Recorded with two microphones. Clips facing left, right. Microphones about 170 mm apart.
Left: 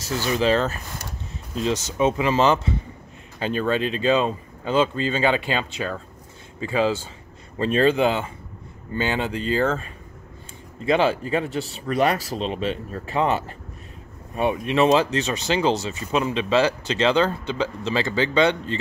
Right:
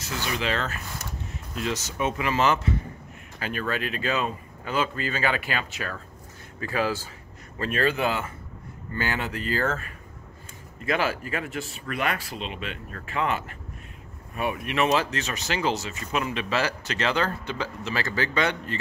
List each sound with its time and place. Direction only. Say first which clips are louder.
0.0 s speech: left 7 dB; 35° left (ahead or behind)